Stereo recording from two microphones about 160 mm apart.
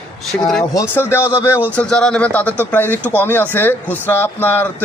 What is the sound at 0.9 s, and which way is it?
Speech, 15° left (ahead or behind).